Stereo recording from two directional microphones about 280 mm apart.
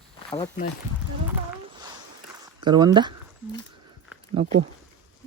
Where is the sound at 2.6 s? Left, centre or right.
Centre.